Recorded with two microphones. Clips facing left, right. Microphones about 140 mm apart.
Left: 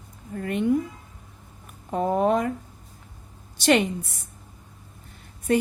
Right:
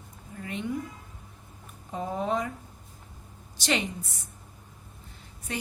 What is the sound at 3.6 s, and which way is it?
Speech, 55° left (ahead or behind).